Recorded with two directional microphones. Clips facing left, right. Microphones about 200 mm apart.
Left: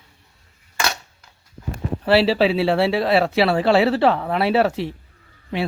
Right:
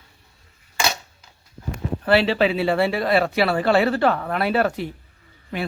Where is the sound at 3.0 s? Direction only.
Centre (ahead or behind).